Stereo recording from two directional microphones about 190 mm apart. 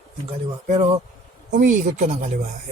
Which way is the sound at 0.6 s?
45° right (ahead or behind).